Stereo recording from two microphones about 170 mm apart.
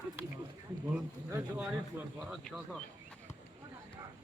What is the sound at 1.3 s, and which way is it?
Speech, 5° right (ahead or behind).